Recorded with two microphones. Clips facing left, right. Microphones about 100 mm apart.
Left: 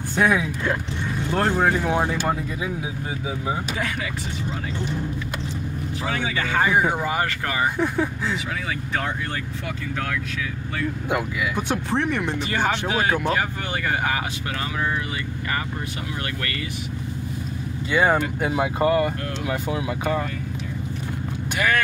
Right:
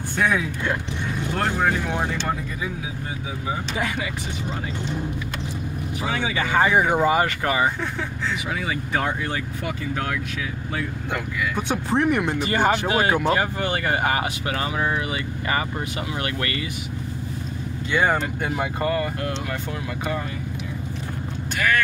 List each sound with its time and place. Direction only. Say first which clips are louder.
0.1 s speech: left 2 dB; 15° left (ahead or behind)
6.0 s speech: right 1 dB; 15° right (ahead or behind)
11.1 s speech: left 3 dB; 10° left (ahead or behind)
11.7 s speech: right 4 dB; 10° right (ahead or behind)
17.9 s speech: left 2 dB; 5° left (ahead or behind)
21.5 s speech: even; 15° left (ahead or behind)